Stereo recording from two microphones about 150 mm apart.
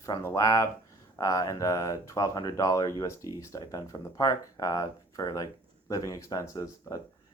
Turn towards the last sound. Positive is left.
turn(degrees=20)  # may be behind; listen again after turning